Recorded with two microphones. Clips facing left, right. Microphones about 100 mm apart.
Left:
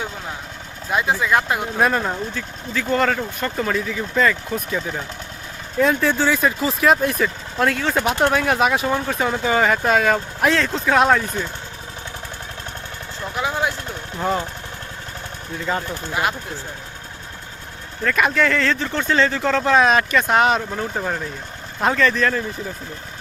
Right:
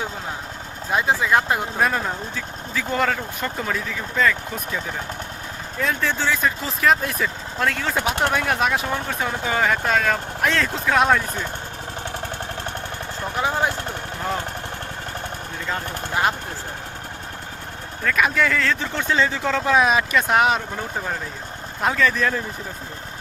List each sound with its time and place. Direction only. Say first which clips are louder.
0.9 s speech: even; 30° right (ahead or behind)
1.8 s speech: left 3 dB; 5° left (ahead or behind)
5.8 s speech: left 5 dB; 10° left (ahead or behind)
13.3 s speech: even; 35° right (ahead or behind)
15.7 s speech: left 4 dB; 5° left (ahead or behind)
18.0 s speech: left 2 dB; centre (ahead or behind)
21.8 s speech: left 2 dB; centre (ahead or behind)